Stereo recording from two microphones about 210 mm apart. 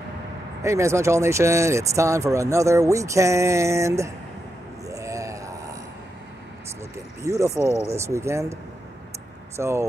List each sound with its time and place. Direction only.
0.6 s speech: 15° right (ahead or behind)
4.8 s a sound: 15° right (ahead or behind)
7.2 s speech: 15° right (ahead or behind)
9.6 s speech: 15° right (ahead or behind)